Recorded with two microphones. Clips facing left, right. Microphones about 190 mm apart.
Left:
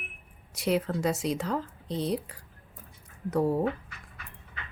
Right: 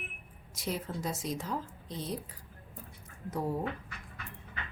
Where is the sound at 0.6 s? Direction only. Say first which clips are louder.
Left 9 dB; 70° left (ahead or behind).